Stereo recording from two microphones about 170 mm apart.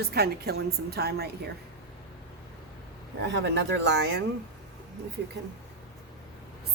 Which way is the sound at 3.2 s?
90° right.